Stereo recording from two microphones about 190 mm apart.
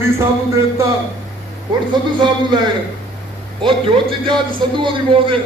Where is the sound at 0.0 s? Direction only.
15° right (ahead or behind).